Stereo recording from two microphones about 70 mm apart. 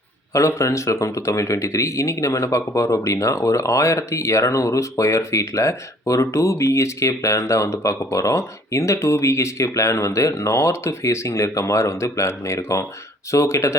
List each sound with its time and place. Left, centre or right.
0.3 s speech: left